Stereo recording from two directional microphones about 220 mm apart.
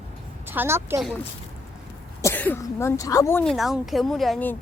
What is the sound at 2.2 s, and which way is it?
Speech, 10° left (ahead or behind).